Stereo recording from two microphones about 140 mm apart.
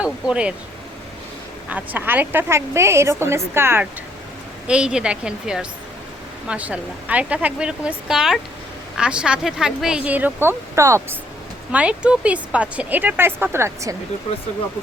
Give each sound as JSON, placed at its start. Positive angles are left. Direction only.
{"t": 0.0, "sound": "speech", "side_deg": -10}
{"t": 1.7, "sound": "speech", "side_deg": -10}
{"t": 4.6, "sound": "a woman's voice", "side_deg": -5}
{"t": 11.7, "sound": "speech", "side_deg": -10}